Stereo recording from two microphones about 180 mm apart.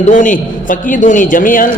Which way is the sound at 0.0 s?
45° left (ahead or behind).